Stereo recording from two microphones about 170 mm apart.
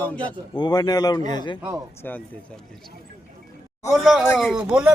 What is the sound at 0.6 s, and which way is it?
Speech, 25° left (ahead or behind).